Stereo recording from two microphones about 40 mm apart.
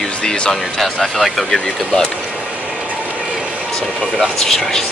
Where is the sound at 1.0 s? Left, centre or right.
Centre.